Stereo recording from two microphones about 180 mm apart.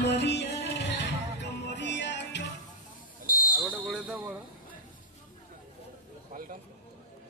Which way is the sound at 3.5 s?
10° right (ahead or behind).